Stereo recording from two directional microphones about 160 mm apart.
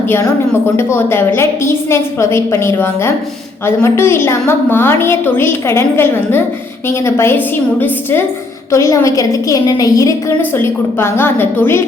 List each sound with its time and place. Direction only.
0.8 s a woman's voice: 15° left (ahead or behind)